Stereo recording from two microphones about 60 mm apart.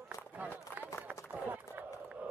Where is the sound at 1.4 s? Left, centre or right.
Right.